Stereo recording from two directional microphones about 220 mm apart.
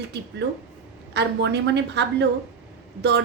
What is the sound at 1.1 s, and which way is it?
A woman's voice, 50° right (ahead or behind).